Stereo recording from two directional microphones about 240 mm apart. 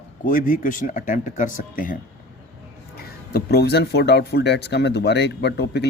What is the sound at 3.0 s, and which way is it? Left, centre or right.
Speech, left.